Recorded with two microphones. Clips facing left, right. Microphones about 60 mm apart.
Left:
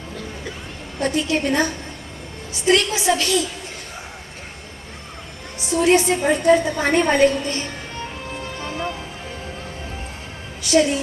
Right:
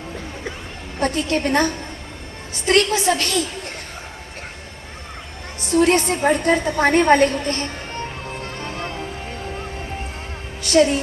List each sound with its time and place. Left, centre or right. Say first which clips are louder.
1.0 s a woman's voice: even; right
5.5 s a woman's voice: even; right
8.5 s music: left 3 dB; right
10.6 s a woman's voice: right 2 dB; right